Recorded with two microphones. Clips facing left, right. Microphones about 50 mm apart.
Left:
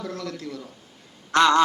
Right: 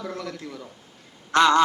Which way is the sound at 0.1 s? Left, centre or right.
Centre.